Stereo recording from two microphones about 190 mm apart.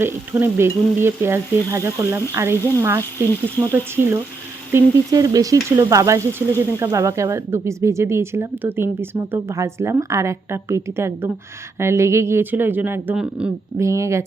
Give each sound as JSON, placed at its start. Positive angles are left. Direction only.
{"t": 0.0, "sound": "frying", "side_deg": -10}
{"t": 13.7, "sound": "frying", "side_deg": -15}